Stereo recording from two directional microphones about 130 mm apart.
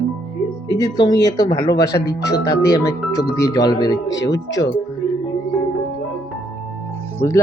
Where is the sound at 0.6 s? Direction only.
30° left (ahead or behind).